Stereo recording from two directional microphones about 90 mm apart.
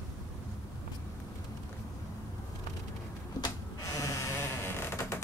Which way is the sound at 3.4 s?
40° left (ahead or behind).